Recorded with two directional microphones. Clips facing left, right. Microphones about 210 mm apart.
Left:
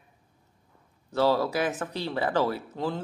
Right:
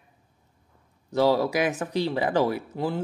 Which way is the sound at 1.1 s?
15° right (ahead or behind).